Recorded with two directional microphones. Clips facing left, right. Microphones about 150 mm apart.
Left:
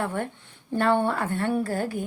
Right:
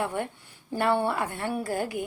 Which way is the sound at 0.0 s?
15° right (ahead or behind).